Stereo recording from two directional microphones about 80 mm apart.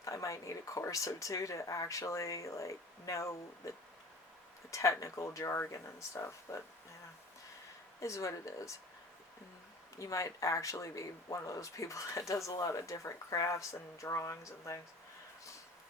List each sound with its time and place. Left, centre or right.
0.0 s speech: left
4.7 s speech: left
8.0 s speech: left
10.0 s speech: left